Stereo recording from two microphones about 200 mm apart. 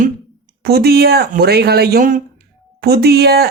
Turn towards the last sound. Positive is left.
turn(degrees=-55)  # may be behind; listen again after turning